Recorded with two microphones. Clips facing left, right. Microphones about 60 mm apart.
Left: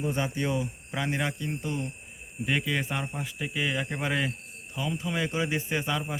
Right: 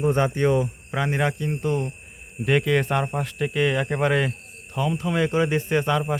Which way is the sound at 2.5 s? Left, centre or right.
Right.